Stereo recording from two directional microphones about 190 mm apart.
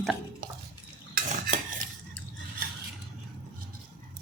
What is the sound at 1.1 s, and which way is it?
Cutlery, 45° right (ahead or behind).